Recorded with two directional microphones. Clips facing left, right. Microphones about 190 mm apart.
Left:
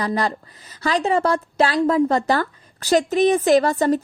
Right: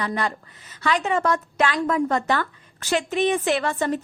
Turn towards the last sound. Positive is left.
turn(degrees=40)  # may be behind; listen again after turning